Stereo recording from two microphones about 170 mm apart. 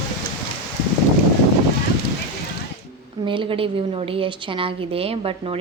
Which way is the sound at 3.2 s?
30° right (ahead or behind).